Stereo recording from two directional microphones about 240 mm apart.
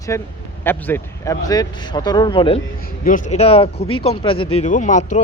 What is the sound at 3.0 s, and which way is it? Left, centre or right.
Speech, left.